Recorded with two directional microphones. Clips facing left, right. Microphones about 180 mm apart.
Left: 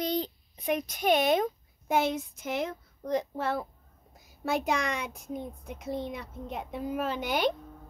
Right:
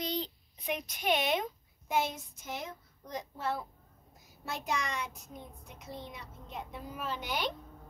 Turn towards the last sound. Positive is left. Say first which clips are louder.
# left 7 dB
turn(degrees=55)  # may be behind; listen again after turning